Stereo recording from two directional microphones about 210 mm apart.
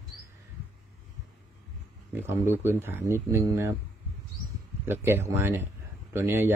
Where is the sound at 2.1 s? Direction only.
10° right (ahead or behind).